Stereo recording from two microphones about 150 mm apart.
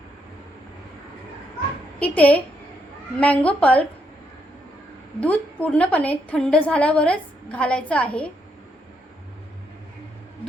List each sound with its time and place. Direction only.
2.0 s a woman's voice: 10° left (ahead or behind)
5.2 s a woman's voice: 10° left (ahead or behind)